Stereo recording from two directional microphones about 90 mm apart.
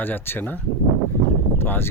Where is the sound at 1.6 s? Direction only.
25° left (ahead or behind).